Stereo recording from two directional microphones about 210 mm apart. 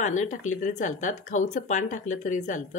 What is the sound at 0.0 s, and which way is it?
Speech, 35° left (ahead or behind).